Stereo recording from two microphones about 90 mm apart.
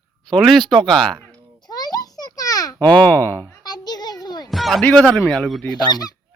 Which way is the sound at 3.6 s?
50° left (ahead or behind).